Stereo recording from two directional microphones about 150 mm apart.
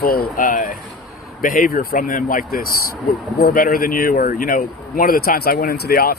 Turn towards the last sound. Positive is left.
turn(degrees=85)